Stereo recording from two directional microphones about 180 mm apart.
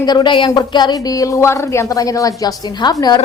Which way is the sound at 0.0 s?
25° left (ahead or behind).